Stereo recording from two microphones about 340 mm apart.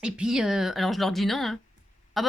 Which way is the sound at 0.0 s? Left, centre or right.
Centre.